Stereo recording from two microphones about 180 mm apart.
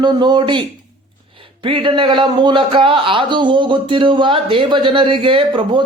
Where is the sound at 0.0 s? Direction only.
25° right (ahead or behind).